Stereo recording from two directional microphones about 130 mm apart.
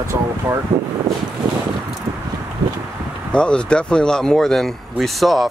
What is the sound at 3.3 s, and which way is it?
Speech, 10° left (ahead or behind).